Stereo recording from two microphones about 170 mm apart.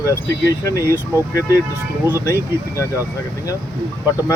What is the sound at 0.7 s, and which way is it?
Speech, 20° left (ahead or behind).